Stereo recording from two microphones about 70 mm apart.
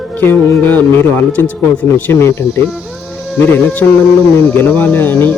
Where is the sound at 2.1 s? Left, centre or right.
Left.